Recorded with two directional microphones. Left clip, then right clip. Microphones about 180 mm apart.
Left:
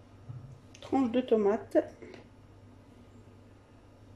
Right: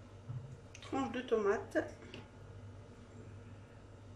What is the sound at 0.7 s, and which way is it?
Speech, 25° left (ahead or behind).